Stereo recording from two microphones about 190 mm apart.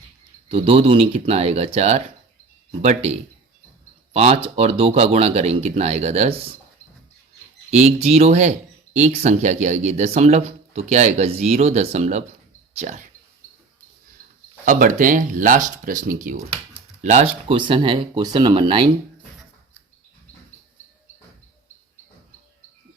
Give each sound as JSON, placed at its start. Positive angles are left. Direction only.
{"t": 0.4, "sound": "speech", "side_deg": -30}
{"t": 7.7, "sound": "speech", "side_deg": -35}
{"t": 14.6, "sound": "speech", "side_deg": -45}
{"t": 17.5, "sound": "speech", "side_deg": -25}